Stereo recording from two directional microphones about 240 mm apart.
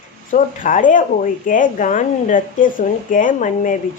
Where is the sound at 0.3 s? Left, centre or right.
Left.